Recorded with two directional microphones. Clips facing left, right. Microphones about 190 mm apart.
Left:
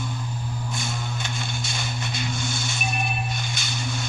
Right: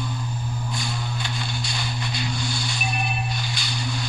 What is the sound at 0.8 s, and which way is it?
Music, 50° left (ahead or behind).